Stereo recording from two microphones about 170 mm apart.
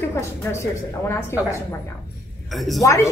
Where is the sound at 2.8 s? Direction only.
15° left (ahead or behind).